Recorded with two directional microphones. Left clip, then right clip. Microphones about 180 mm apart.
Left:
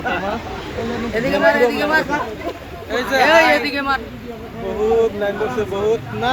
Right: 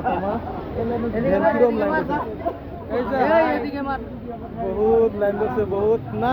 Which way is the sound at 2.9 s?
45° left (ahead or behind).